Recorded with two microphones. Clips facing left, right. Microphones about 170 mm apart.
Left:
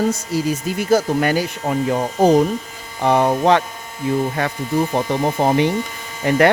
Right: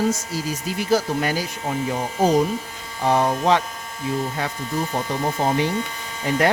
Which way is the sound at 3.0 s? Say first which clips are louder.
Left 4 dB; 60° left (ahead or behind).